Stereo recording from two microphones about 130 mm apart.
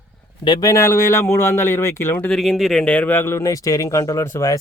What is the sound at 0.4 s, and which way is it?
A man's voice, 30° left (ahead or behind).